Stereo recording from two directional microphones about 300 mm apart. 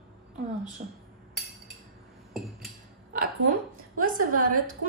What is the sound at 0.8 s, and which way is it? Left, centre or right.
Speech, right.